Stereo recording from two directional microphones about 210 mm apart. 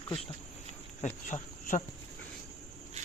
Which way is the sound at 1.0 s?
35° left (ahead or behind).